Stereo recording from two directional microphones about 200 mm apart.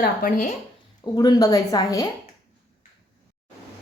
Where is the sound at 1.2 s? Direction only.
20° left (ahead or behind).